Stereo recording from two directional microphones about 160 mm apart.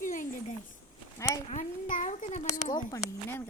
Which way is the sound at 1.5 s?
50° left (ahead or behind).